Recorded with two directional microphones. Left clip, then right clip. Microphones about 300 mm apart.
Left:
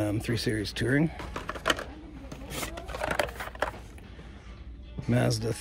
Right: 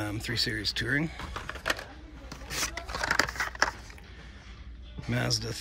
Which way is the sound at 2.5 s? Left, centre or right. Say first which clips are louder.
Right 3 dB; centre.